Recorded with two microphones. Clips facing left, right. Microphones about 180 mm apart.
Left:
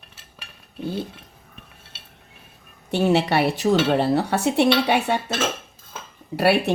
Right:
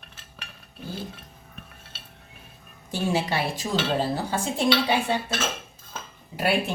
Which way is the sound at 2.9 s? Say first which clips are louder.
Left 7 dB; 65° left (ahead or behind).